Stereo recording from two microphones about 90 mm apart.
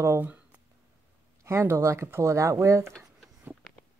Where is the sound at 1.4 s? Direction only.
30° right (ahead or behind).